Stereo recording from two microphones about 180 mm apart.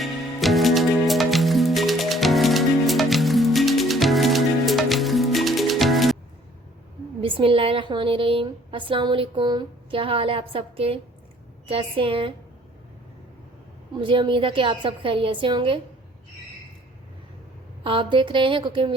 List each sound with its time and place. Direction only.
0.0 s music: centre (ahead or behind)
7.2 s a woman's voice: 30° right (ahead or behind)
14.0 s a woman's voice: 30° right (ahead or behind)
17.8 s a woman's voice: 25° right (ahead or behind)